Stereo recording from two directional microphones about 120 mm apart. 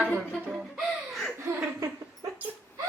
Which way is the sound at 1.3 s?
25° right (ahead or behind).